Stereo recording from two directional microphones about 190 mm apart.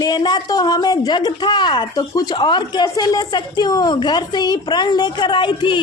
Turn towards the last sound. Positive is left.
turn(degrees=25)  # may be behind; listen again after turning